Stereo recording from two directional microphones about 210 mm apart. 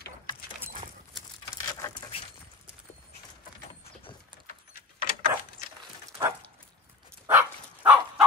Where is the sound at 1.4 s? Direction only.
15° left (ahead or behind).